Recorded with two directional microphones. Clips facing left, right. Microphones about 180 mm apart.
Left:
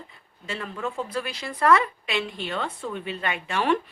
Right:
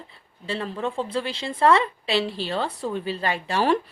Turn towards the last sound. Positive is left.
turn(degrees=-35)  # may be behind; listen again after turning